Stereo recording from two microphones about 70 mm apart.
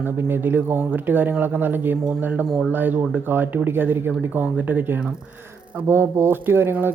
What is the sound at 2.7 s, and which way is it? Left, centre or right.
Speech, right.